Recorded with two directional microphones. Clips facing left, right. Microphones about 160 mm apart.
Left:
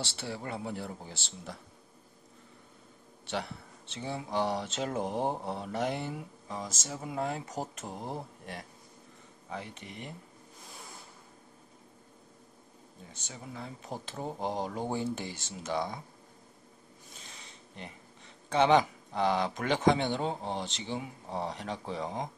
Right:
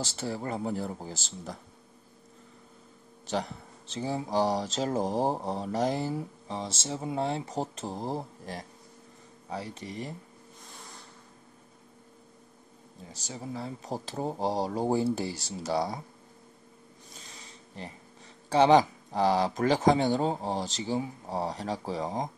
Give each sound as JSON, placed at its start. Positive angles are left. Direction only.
{"t": 0.0, "sound": "speech", "side_deg": -40}
{"t": 3.3, "sound": "speech", "side_deg": -40}
{"t": 13.1, "sound": "speech", "side_deg": -35}
{"t": 18.5, "sound": "speech", "side_deg": -35}